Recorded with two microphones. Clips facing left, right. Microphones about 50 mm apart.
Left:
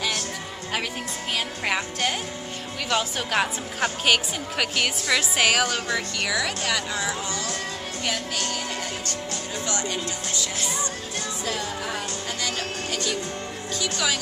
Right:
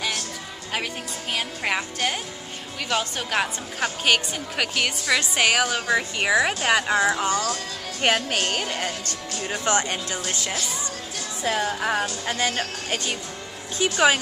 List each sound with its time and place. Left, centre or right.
1.3 s a woman's voice: centre
5.9 s speech: centre; by 14.2 s right